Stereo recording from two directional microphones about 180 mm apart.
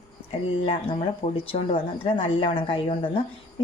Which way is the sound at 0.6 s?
30° left (ahead or behind).